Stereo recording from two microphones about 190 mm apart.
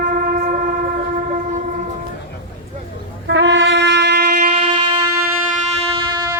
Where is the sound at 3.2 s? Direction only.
70° right (ahead or behind).